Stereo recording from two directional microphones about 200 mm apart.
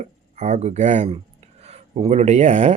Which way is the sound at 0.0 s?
35° right (ahead or behind).